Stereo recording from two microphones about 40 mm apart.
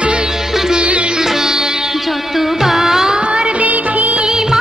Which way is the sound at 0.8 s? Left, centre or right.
Right.